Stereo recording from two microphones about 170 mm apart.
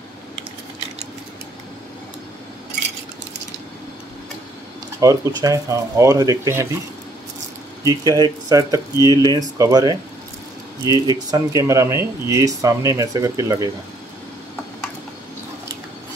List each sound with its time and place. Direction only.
5.0 s speech: 20° right (ahead or behind)
7.8 s speech: 20° right (ahead or behind)